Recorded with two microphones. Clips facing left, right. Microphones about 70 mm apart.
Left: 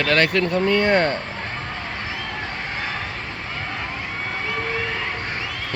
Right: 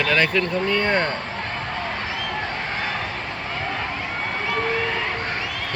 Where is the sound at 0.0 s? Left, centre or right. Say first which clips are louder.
Left 1 dB; left.